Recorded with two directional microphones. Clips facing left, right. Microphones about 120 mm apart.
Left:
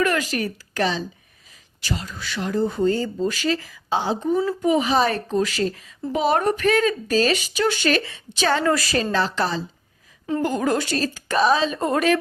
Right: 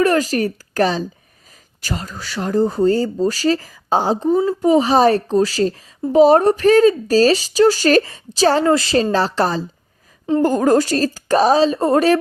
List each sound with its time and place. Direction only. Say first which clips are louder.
0.0 s speech: right 6 dB; 35° right (ahead or behind)